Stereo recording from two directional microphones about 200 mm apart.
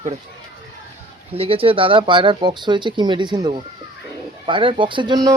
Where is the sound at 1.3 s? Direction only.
30° right (ahead or behind).